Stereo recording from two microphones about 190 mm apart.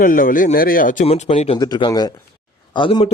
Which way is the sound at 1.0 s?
35° left (ahead or behind).